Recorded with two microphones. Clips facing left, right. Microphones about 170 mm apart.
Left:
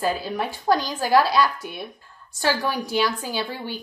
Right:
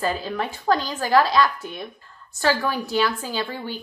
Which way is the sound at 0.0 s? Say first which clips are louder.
Even; 10° left (ahead or behind).